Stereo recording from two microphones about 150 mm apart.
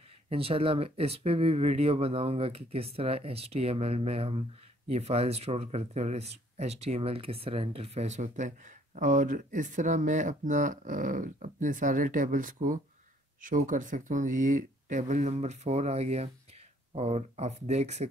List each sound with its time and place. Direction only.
0.3 s speech: 40° right (ahead or behind)